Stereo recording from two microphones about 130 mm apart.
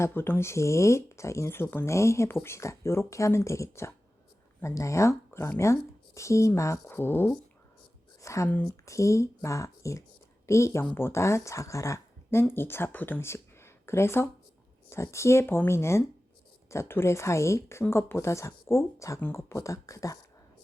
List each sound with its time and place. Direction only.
0.0 s speech: 15° left (ahead or behind)